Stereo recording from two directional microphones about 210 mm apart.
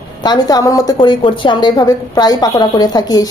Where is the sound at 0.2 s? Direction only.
20° left (ahead or behind).